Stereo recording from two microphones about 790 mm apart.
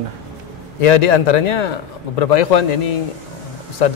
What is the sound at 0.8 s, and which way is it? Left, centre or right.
Speech, left.